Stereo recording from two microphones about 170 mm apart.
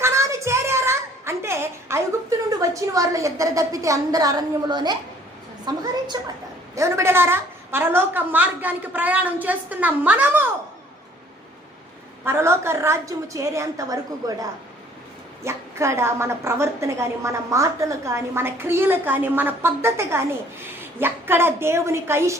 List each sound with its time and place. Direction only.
0.0 s music: 15° right (ahead or behind)
2.5 s a woman's voice: 20° right (ahead or behind)
12.2 s a woman's voice: 15° right (ahead or behind)
15.4 s a woman's voice: 15° right (ahead or behind)